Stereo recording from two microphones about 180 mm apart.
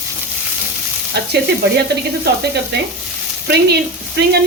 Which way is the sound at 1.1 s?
70° right (ahead or behind).